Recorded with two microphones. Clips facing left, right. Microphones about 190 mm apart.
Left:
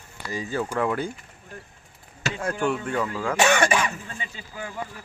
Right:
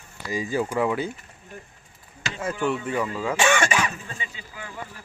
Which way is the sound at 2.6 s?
5° right (ahead or behind).